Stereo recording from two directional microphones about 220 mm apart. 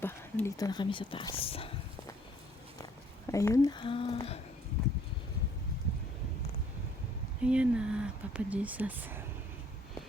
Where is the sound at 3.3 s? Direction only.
15° left (ahead or behind).